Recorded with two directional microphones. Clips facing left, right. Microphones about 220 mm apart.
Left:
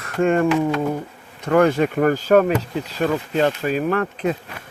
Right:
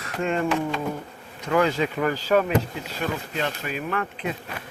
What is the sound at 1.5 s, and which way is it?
Speech, 55° left (ahead or behind).